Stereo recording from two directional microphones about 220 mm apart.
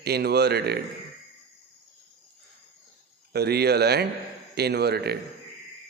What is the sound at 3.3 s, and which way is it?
Speech, 45° right (ahead or behind).